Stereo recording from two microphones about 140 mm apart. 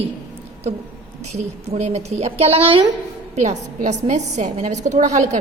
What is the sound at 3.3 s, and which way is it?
A woman's voice, 55° right (ahead or behind).